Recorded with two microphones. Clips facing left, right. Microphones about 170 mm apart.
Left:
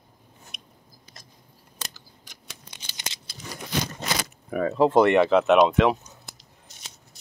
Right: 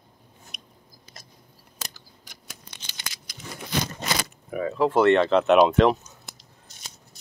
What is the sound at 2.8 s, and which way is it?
Scissors, 20° left (ahead or behind).